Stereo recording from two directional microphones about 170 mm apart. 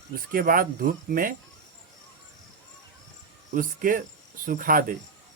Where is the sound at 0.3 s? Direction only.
55° right (ahead or behind).